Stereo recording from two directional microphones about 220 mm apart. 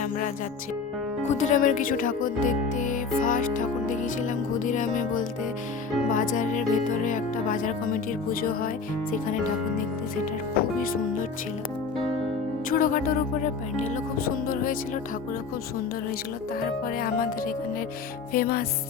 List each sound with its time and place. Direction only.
1.2 s speech: 35° left (ahead or behind)
12.7 s speech: 40° left (ahead or behind)
16.6 s speech: 40° left (ahead or behind)
18.3 s music: 40° left (ahead or behind)